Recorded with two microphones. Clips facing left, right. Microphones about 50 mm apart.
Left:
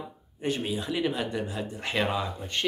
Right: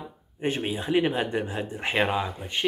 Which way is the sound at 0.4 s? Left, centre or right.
Right.